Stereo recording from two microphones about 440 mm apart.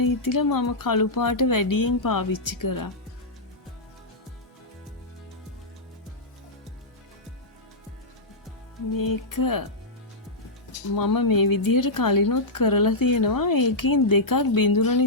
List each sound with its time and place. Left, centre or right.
0.0 s speech: left
9.0 s speech: left
10.9 s speech: left